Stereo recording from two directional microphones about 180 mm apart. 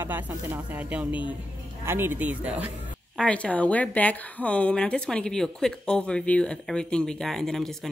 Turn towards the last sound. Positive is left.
turn(degrees=0)  # may be behind; listen again after turning